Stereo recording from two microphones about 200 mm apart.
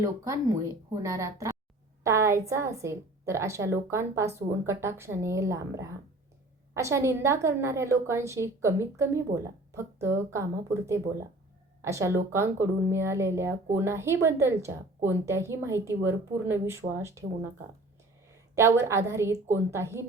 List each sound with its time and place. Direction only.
0.0 s a woman's voice: 15° right (ahead or behind)